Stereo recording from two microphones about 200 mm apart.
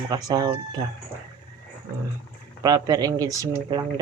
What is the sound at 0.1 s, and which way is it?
Speech, 20° right (ahead or behind).